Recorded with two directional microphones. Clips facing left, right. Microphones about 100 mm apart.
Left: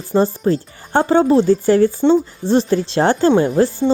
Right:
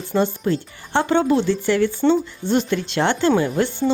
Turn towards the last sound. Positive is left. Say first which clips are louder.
# left 5 dB
turn(degrees=35)  # may be behind; listen again after turning